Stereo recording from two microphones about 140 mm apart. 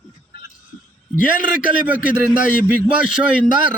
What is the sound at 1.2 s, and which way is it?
Speech, 70° left (ahead or behind).